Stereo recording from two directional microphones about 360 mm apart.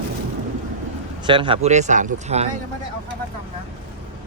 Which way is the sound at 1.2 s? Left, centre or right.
Centre.